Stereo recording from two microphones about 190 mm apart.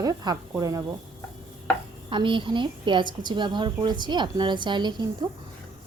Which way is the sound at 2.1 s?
25° right (ahead or behind).